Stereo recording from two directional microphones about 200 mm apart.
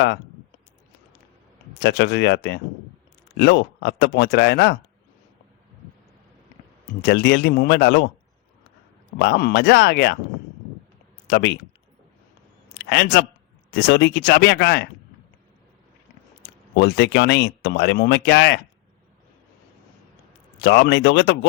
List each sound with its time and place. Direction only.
1.8 s speech: 55° left (ahead or behind)
7.0 s speech: 55° left (ahead or behind)
9.1 s speech: 55° left (ahead or behind)
11.3 s speech: 60° left (ahead or behind)
12.8 s speech: 60° left (ahead or behind)
16.4 s speech: 55° left (ahead or behind)
20.6 s speech: 60° left (ahead or behind)